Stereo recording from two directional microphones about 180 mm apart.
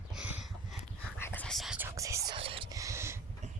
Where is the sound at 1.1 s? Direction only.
10° left (ahead or behind).